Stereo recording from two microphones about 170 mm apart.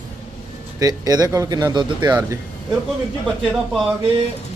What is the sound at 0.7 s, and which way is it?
Speech, 20° right (ahead or behind).